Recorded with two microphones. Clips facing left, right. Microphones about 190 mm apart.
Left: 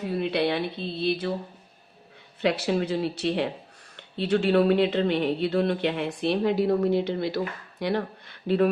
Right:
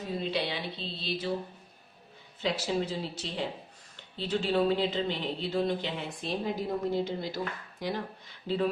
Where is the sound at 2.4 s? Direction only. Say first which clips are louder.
Left 6 dB; 65° left (ahead or behind).